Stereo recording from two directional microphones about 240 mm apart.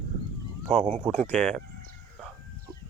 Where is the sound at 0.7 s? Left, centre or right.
Centre.